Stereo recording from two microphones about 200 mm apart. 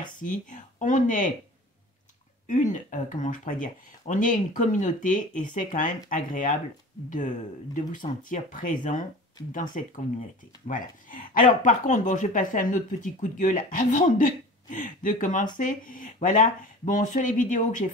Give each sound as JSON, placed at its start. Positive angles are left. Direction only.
{"t": 0.0, "sound": "speech", "side_deg": 40}
{"t": 2.4, "sound": "speech", "side_deg": 40}